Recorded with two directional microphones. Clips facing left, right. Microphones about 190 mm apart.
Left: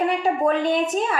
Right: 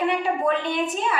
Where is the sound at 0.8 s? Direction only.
45° left (ahead or behind).